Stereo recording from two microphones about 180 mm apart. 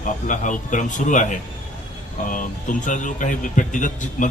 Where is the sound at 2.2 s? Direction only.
45° left (ahead or behind).